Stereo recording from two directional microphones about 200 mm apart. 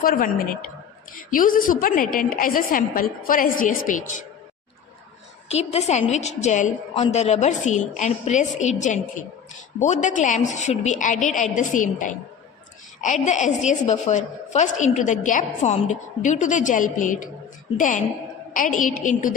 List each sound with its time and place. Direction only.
0.0 s a woman's voice: 45° left (ahead or behind)
5.5 s a woman's voice: 30° left (ahead or behind)